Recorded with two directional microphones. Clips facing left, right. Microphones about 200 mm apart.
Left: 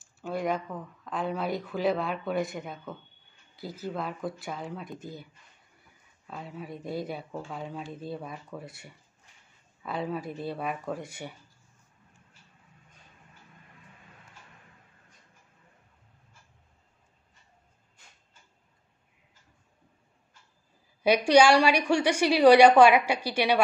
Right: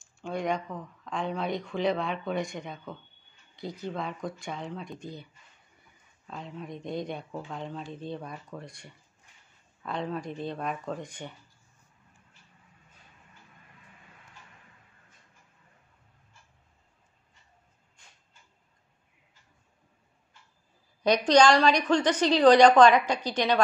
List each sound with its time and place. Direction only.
0.0 s speech: 5° left (ahead or behind)
21.0 s speech: 10° left (ahead or behind)